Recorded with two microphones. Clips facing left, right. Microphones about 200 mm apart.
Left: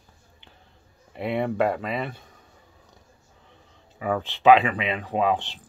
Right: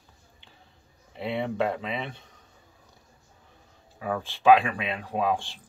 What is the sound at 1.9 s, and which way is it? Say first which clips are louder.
Speech: left 4 dB; 5° left (ahead or behind).